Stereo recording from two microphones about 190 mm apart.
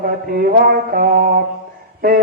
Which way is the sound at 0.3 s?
50° right (ahead or behind).